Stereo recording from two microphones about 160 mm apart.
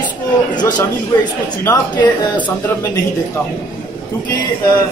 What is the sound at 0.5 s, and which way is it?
Speech, 25° left (ahead or behind).